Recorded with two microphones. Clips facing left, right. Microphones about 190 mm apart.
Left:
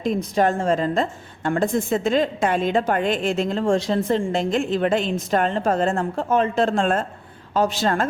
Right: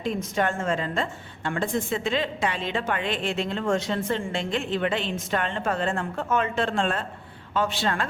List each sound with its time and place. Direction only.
0.0 s a woman's voice: 35° left (ahead or behind)